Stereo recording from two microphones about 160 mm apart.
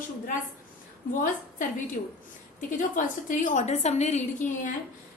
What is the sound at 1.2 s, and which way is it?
A woman's voice, 55° left (ahead or behind).